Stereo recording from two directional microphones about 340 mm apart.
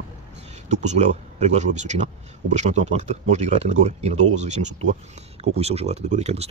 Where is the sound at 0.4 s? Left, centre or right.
Centre.